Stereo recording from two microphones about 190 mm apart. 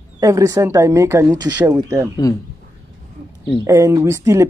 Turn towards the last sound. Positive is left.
turn(degrees=-15)  # may be behind; listen again after turning